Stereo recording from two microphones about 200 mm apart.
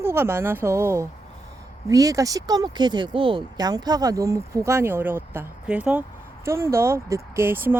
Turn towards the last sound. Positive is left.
turn(degrees=-10)  # may be behind; listen again after turning